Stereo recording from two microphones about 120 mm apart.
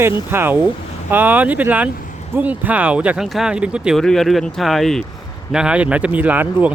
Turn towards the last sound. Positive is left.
turn(degrees=-15)  # may be behind; listen again after turning